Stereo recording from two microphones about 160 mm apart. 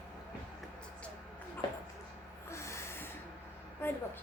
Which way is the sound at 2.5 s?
15° left (ahead or behind).